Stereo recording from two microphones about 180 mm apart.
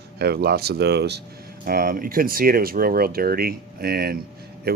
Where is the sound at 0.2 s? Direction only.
60° right (ahead or behind).